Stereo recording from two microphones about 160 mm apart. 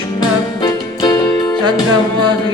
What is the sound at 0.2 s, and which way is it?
Music, 25° left (ahead or behind).